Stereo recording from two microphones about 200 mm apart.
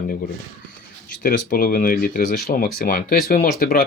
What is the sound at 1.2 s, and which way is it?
Speech, 45° left (ahead or behind).